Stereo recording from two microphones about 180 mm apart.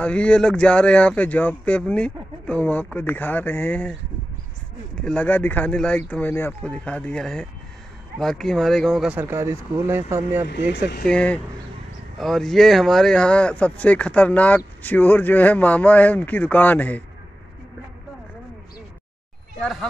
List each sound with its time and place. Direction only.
0.0 s speech: 5° left (ahead or behind)
4.9 s speech: 5° left (ahead or behind)
9.2 s speech: 15° right (ahead or behind)
10.7 s speech: 65° left (ahead or behind)
11.1 s speech: 5° left (ahead or behind)
19.6 s speech: centre (ahead or behind)